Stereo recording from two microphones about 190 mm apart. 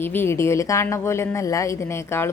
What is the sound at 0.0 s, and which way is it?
A woman's voice, 10° left (ahead or behind).